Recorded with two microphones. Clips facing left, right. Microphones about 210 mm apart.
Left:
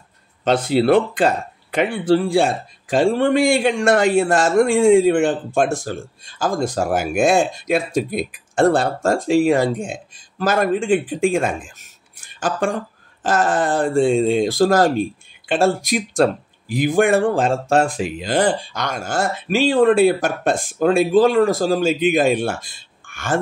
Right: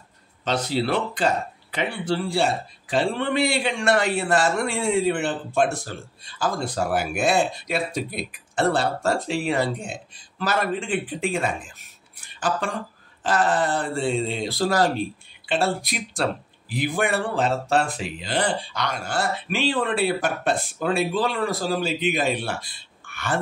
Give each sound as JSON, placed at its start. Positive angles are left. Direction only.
{"t": 0.5, "sound": "speech", "side_deg": 50}
{"t": 12.2, "sound": "a sound", "side_deg": 45}
{"t": 13.2, "sound": "speech", "side_deg": 45}